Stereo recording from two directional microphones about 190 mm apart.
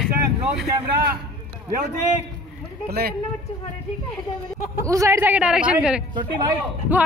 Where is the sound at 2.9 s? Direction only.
55° right (ahead or behind).